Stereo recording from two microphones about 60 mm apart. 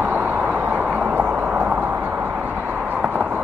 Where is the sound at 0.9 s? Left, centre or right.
Right.